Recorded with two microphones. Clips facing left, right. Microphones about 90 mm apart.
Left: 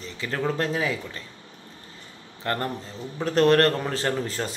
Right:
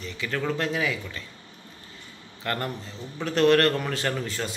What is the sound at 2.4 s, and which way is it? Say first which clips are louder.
A man's voice: left 2 dB; 35° left (ahead or behind).